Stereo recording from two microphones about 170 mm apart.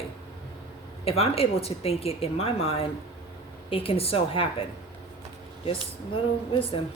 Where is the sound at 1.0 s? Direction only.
35° left (ahead or behind).